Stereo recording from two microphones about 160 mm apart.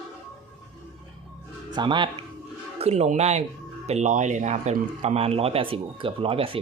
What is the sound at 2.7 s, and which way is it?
Speech, 40° right (ahead or behind).